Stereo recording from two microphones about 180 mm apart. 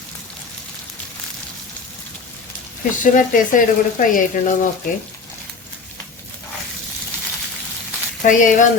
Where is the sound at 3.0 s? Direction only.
45° left (ahead or behind).